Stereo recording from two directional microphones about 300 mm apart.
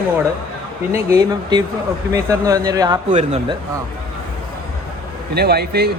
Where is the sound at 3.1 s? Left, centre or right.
Right.